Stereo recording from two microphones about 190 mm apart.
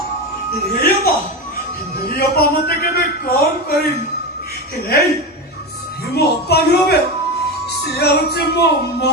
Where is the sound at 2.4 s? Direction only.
55° left (ahead or behind).